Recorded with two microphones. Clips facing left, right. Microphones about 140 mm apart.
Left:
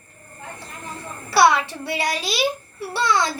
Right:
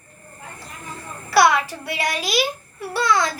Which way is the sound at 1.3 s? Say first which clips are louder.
Even; 30° left (ahead or behind).